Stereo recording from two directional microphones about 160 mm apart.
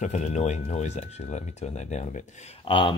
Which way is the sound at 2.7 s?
35° left (ahead or behind).